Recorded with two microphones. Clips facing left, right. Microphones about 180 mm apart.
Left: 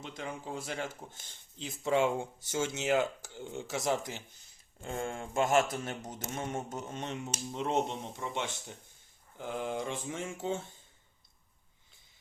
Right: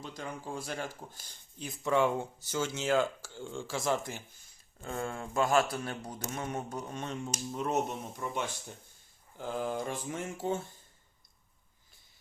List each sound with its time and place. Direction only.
0.0 s a sound: 25° left (ahead or behind)
0.4 s speech: 20° left (ahead or behind)
9.6 s speech: 25° left (ahead or behind)